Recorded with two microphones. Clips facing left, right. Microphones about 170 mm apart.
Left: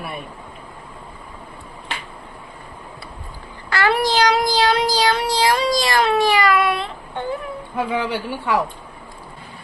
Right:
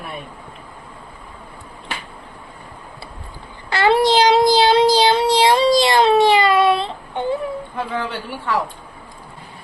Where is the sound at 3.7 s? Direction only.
25° right (ahead or behind).